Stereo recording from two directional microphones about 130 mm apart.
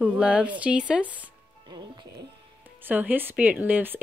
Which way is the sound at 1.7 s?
35° right (ahead or behind).